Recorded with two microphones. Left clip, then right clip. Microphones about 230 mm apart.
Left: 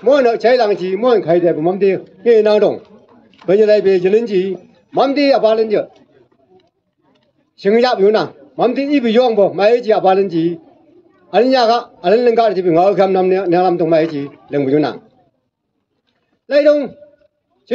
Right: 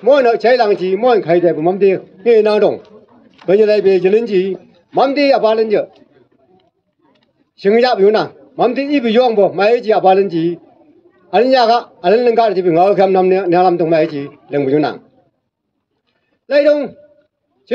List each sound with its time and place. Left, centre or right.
0.0 s a man's voice: right
7.1 s a man's voice: right
16.4 s a man's voice: right